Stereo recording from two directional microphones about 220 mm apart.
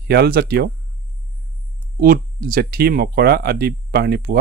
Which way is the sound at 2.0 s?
40° right (ahead or behind).